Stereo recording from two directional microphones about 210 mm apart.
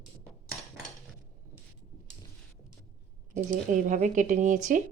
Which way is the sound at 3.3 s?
35° right (ahead or behind).